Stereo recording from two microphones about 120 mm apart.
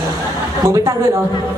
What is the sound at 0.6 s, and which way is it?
Speech, 25° right (ahead or behind).